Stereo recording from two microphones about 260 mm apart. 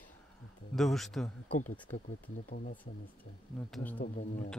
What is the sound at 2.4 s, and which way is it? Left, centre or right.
Speech, left.